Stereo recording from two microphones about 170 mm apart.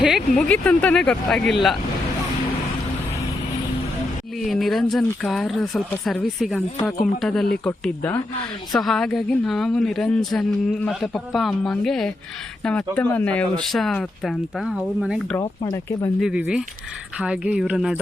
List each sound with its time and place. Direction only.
0.3 s a woman's voice: 5° left (ahead or behind)
4.4 s a woman's voice: centre (ahead or behind)
15.4 s speech: 20° left (ahead or behind)
16.2 s a woman's voice: 5° right (ahead or behind)